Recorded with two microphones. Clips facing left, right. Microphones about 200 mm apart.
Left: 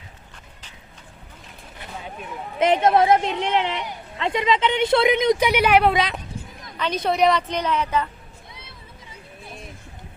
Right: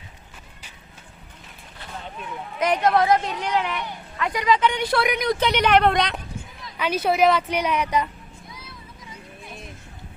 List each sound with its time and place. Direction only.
2.6 s a woman's voice: 25° left (ahead or behind)
5.5 s speech: 10° left (ahead or behind)
6.7 s a woman's voice: 10° right (ahead or behind)